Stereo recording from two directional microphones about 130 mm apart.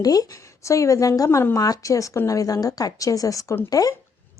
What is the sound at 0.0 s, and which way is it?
Speech, 30° left (ahead or behind).